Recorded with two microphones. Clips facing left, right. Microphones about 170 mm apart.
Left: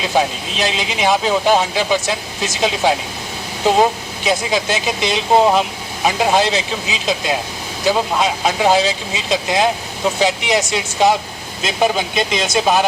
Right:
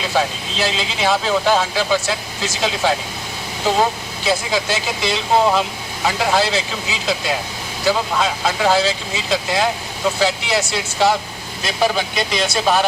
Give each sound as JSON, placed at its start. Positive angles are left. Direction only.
{"t": 0.1, "sound": "speech", "side_deg": 20}